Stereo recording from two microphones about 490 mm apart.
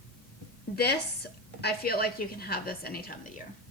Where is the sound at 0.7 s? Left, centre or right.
Centre.